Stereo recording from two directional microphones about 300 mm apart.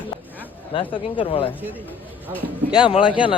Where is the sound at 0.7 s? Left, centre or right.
Centre.